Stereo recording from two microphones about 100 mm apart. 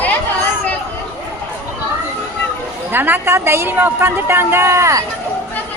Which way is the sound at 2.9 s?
20° right (ahead or behind).